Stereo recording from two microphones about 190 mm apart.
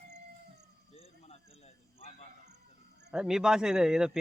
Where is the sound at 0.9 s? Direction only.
35° left (ahead or behind).